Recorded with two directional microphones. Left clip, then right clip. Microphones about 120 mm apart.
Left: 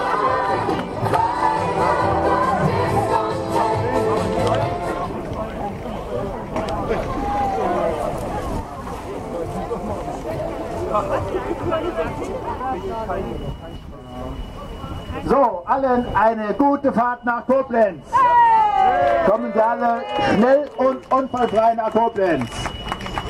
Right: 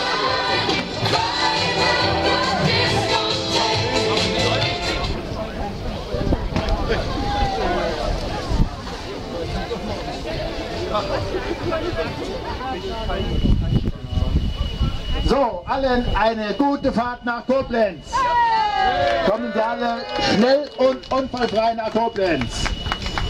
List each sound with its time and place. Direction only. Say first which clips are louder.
0.0 s music: left 2 dB; 35° right (ahead or behind)
0.5 s music: even; 10° right (ahead or behind)
6.5 s run: left 1 dB; 15° right (ahead or behind)
7.0 s a sound: left 1 dB; 15° right (ahead or behind)
10.9 s music: left 2 dB; 20° right (ahead or behind)
15.2 s a sound: left 3 dB; 40° right (ahead or behind)
16.6 s speech: left 4 dB; 45° right (ahead or behind)
18.1 s a sound: left 5 dB; 5° right (ahead or behind)
18.9 s a man's voice: left 2 dB; 15° right (ahead or behind)
19.3 s speech: left 3 dB; 35° right (ahead or behind)
19.9 s a man's voice: left 2 dB; 20° right (ahead or behind)